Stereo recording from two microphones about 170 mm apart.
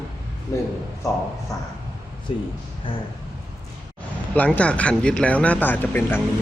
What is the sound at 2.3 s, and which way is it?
Speech, 30° left (ahead or behind).